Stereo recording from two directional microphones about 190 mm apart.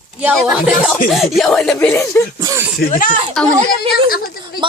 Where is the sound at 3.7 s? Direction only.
50° left (ahead or behind).